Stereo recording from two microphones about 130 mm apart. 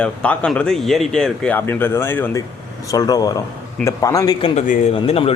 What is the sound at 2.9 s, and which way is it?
Speech, 30° left (ahead or behind).